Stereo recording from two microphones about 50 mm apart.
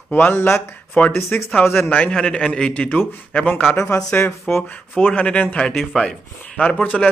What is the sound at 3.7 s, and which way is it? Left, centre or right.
Speech, left.